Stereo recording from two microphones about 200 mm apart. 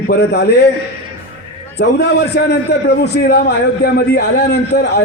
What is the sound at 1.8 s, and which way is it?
A man's voice, 55° left (ahead or behind).